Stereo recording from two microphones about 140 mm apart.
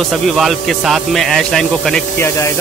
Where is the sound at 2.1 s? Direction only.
20° left (ahead or behind).